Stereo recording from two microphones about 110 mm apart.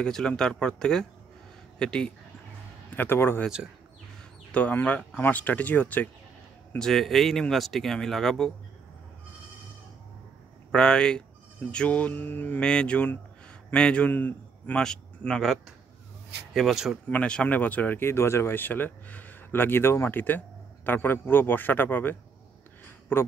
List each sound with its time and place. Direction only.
0.0 s speech: 10° left (ahead or behind)
3.0 s speech: 20° left (ahead or behind)
4.5 s speech: 15° left (ahead or behind)
6.8 s speech: centre (ahead or behind)
10.7 s a man's voice: 5° left (ahead or behind)
14.8 s speech: 5° left (ahead or behind)
17.1 s speech: 10° left (ahead or behind)